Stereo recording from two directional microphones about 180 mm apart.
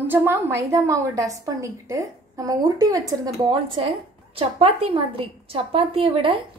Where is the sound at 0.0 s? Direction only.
10° right (ahead or behind).